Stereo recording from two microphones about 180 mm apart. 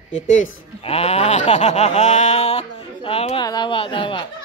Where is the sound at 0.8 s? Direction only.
35° left (ahead or behind).